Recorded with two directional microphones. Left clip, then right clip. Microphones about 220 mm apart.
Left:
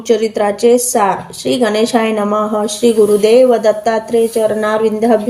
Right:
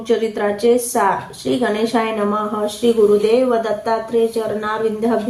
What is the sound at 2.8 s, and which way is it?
Speech, 30° left (ahead or behind).